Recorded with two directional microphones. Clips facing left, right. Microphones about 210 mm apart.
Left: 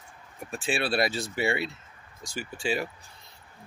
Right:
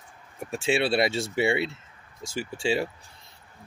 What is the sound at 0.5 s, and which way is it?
Speech, 25° right (ahead or behind).